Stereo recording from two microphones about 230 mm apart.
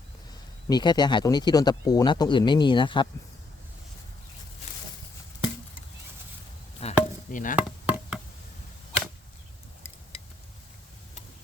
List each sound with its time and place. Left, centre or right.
0.7 s speech: centre
6.7 s chop: left
7.5 s chop: centre